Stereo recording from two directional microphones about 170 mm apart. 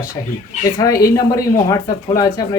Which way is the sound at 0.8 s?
20° left (ahead or behind).